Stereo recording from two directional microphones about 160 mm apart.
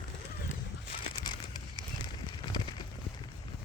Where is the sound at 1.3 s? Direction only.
25° left (ahead or behind).